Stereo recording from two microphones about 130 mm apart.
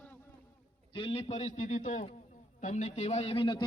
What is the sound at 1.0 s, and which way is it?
A man's voice, 45° left (ahead or behind).